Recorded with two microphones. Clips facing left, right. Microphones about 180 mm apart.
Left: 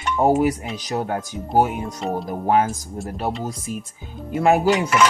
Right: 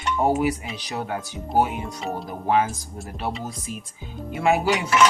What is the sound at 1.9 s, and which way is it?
Speech, centre (ahead or behind).